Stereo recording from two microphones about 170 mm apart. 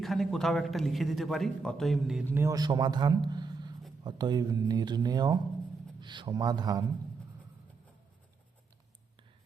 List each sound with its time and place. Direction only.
0.0 s speech: centre (ahead or behind)
2.3 s a man's voice: 15° right (ahead or behind)